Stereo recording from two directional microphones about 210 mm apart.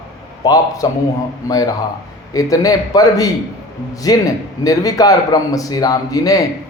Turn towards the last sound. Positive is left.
turn(degrees=15)  # may be behind; listen again after turning